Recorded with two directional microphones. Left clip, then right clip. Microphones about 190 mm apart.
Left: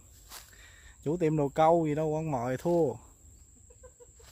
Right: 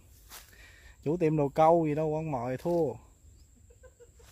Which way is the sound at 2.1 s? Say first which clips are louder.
Left 1 dB; 5° left (ahead or behind).